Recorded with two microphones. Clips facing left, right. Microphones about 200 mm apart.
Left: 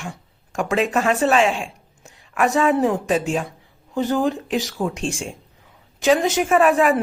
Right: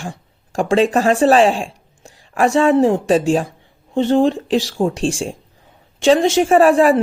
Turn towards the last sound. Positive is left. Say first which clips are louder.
# right 5 dB
turn(degrees=-35)  # may be behind; listen again after turning